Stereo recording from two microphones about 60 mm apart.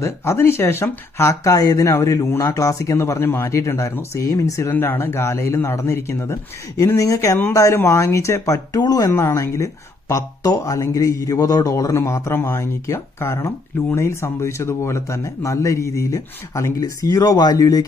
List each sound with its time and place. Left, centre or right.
0.0 s speech: left
1.1 s speech: left
3.4 s speech: left
4.6 s speech: left
7.0 s speech: left
8.7 s speech: left
9.3 s speech: left